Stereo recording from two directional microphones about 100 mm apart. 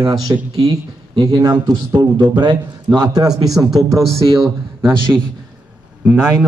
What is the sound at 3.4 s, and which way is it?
Speech, centre (ahead or behind).